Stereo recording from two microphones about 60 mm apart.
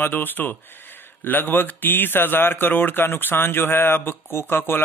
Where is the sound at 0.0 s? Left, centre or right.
Left.